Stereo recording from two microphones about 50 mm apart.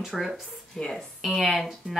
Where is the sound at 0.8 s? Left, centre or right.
Centre.